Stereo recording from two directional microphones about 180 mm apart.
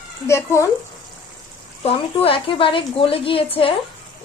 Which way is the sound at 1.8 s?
30° left (ahead or behind).